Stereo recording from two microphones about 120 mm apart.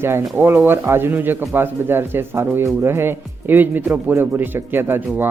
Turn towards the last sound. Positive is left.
turn(degrees=-20)  # may be behind; listen again after turning